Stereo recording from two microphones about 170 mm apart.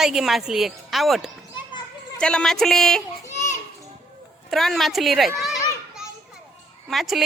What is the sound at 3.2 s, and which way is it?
Children playing, 15° left (ahead or behind).